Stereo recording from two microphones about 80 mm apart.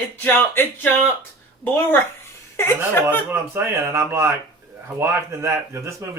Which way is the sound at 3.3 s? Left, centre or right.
Right.